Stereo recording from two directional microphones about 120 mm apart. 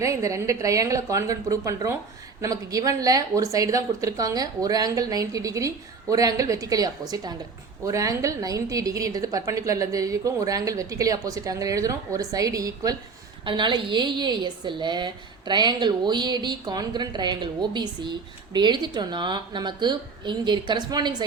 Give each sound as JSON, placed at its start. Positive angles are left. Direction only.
{"t": 0.0, "sound": "a woman's voice", "side_deg": -25}
{"t": 13.4, "sound": "a woman's voice", "side_deg": -45}